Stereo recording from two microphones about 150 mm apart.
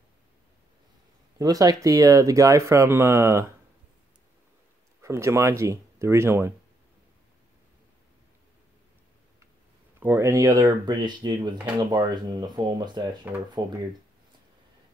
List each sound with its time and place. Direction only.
1.4 s speech: 25° right (ahead or behind)
5.0 s speech: 15° right (ahead or behind)
9.9 s speech: 15° right (ahead or behind)